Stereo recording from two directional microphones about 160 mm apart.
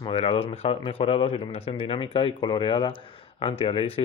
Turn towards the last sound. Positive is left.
turn(degrees=35)  # may be behind; listen again after turning